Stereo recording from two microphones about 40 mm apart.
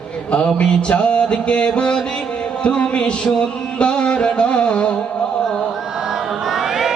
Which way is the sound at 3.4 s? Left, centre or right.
Left.